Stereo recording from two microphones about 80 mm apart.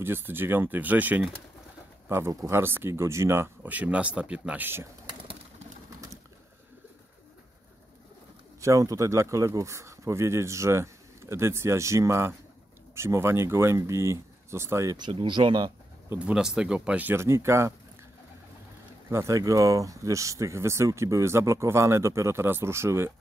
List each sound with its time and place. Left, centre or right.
0.0 s speech: right
2.0 s speech: right
3.6 s speech: centre
8.5 s speech: right
15.0 s speech: right
16.2 s speech: centre
17.0 s speech: right
19.0 s speech: right